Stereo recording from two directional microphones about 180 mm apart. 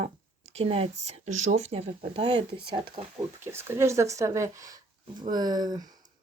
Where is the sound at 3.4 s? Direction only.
15° right (ahead or behind).